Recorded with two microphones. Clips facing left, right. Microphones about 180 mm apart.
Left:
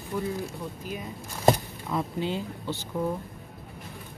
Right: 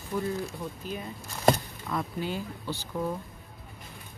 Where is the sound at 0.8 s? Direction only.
10° left (ahead or behind).